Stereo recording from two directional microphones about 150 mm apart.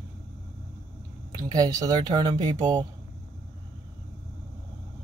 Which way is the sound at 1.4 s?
25° right (ahead or behind).